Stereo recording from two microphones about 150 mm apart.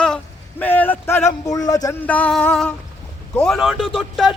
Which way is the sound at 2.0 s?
10° left (ahead or behind).